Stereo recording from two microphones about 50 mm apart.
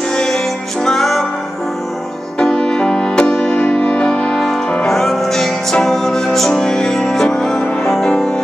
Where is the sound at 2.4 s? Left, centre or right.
Centre.